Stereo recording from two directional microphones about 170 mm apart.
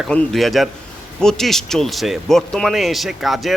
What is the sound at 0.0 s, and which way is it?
Speech, 5° left (ahead or behind).